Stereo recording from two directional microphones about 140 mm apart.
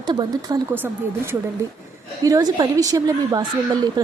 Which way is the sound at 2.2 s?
25° right (ahead or behind).